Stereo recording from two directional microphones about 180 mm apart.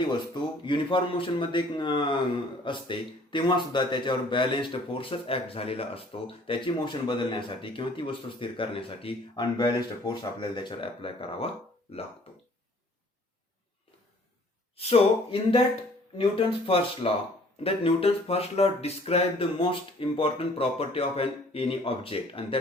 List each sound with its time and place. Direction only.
0.6 s speech: 25° left (ahead or behind)
14.8 s speech: 35° left (ahead or behind)